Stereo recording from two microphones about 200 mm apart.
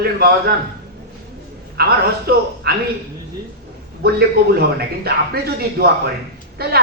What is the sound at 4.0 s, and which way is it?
Speech, 50° right (ahead or behind).